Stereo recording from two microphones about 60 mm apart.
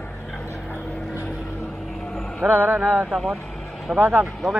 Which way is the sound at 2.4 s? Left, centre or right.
Right.